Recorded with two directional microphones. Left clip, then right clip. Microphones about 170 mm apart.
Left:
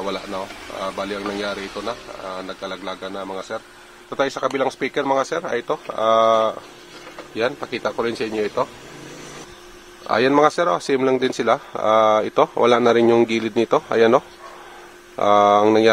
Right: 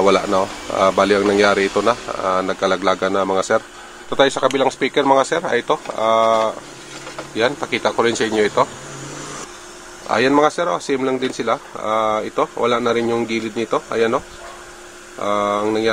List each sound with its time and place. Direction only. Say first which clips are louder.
0.0 s speech: right 12 dB; 30° right (ahead or behind)
4.1 s speech: right 6 dB; centre (ahead or behind)
6.0 s speech: right 1 dB; 20° left (ahead or behind)
10.0 s speech: right 1 dB; 15° left (ahead or behind)